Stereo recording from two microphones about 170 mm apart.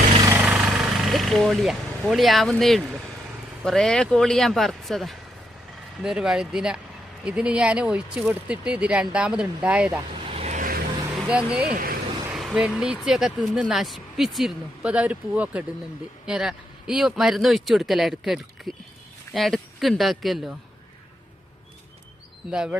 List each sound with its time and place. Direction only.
0.2 s vehicle: 15° right (ahead or behind)
3.6 s speech: centre (ahead or behind)
10.2 s vehicle: 40° right (ahead or behind); by 10.8 s 55° right (ahead or behind)
11.3 s speech: 5° right (ahead or behind)
11.7 s speech: 60° right (ahead or behind)
12.3 s speech: centre (ahead or behind)
22.4 s speech: 5° right (ahead or behind)